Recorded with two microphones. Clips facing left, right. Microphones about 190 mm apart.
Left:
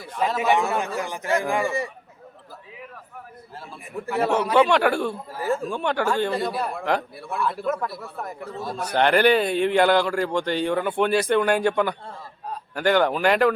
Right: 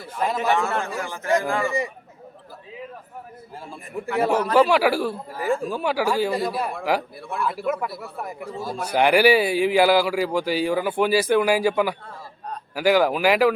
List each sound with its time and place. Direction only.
0.3 s a man's voice: 15° left (ahead or behind)
4.2 s speech: 10° right (ahead or behind)